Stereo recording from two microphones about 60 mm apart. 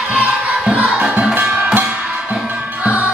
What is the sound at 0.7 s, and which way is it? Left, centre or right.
Music, right.